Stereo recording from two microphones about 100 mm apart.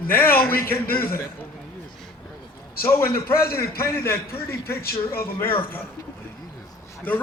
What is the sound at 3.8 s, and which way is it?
A man's voice, 25° left (ahead or behind).